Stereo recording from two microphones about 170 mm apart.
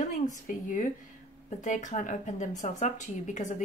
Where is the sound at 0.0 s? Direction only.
45° left (ahead or behind).